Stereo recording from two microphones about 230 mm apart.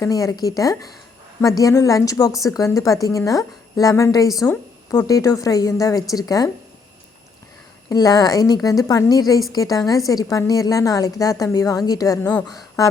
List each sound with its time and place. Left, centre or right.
0.0 s a woman's voice: centre
7.9 s a woman's voice: centre